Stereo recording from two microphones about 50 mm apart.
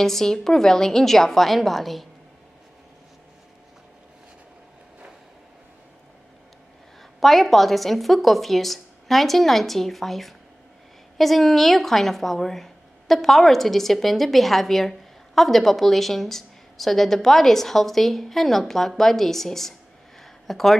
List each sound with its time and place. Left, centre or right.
0.0 s a woman's voice: centre
7.2 s a woman's voice: centre
20.2 s a sound: centre